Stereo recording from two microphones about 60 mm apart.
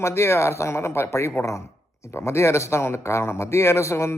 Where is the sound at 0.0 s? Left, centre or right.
Left.